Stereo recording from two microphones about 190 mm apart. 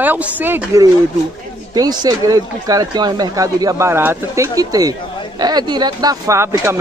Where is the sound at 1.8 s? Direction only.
20° right (ahead or behind).